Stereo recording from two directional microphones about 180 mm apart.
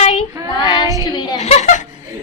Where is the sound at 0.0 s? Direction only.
35° left (ahead or behind).